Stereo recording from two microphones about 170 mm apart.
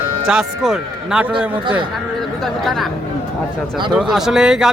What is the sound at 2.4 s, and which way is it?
Speech, centre (ahead or behind).